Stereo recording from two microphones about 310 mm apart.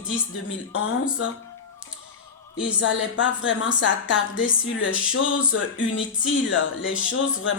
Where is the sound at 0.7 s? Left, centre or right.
Left.